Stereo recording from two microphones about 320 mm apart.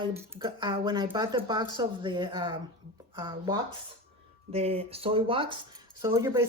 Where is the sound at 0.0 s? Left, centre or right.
Centre.